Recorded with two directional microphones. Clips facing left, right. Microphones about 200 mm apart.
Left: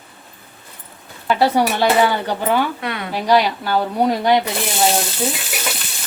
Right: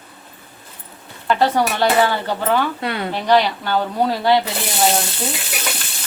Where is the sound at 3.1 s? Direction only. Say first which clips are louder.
Left 1 dB; 10° left (ahead or behind).